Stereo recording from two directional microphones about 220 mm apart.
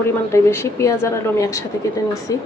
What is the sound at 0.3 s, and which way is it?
Speech, 10° left (ahead or behind).